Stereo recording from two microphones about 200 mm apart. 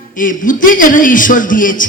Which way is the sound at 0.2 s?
40° left (ahead or behind).